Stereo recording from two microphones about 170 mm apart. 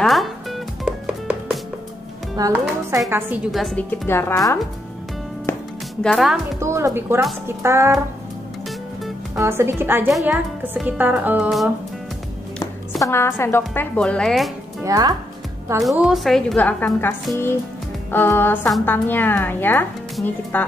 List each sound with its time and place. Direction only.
0.0 s music: centre (ahead or behind)
2.3 s a woman's voice: 20° right (ahead or behind)
3.5 s a woman's voice: centre (ahead or behind)
4.1 s speech: 15° left (ahead or behind)
5.5 s music: 15° left (ahead or behind)
6.0 s a woman's voice: centre (ahead or behind)
6.6 s a woman's voice: 15° right (ahead or behind)
9.3 s a woman's voice: 15° right (ahead or behind)
13.0 s speech: 15° left (ahead or behind)
14.8 s speech: 20° right (ahead or behind)
15.8 s a woman's voice: centre (ahead or behind)